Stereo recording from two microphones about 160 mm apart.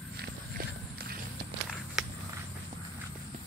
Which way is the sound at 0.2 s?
70° right (ahead or behind).